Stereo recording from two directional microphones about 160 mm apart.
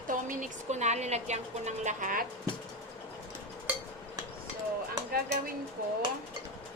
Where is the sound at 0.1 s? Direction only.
55° right (ahead or behind).